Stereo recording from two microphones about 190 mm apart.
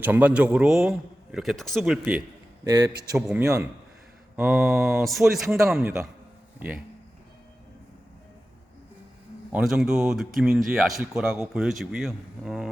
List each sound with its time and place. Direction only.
0.0 s speech: 10° right (ahead or behind)
3.4 s a man's voice: 15° right (ahead or behind)
4.4 s a man's voice: 5° right (ahead or behind)
9.5 s speech: 5° right (ahead or behind)